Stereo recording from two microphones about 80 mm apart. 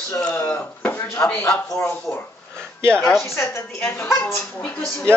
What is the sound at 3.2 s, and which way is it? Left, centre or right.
Speech, left.